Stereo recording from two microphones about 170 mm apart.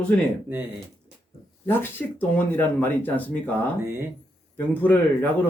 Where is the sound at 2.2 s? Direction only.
10° left (ahead or behind).